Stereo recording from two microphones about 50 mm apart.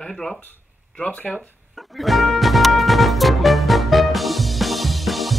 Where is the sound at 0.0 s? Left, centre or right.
Centre.